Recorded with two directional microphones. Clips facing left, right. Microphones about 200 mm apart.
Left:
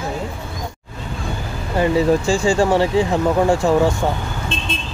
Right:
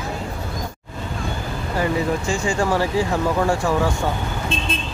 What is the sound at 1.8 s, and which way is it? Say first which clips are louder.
Speech: left 6 dB; 30° left (ahead or behind).